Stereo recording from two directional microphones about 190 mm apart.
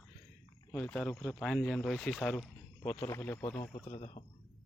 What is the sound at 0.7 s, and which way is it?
Speech, 10° left (ahead or behind).